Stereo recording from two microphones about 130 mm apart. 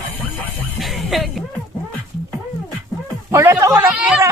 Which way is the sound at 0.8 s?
Centre (ahead or behind).